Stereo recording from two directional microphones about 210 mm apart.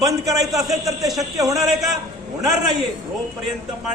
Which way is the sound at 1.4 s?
15° right (ahead or behind).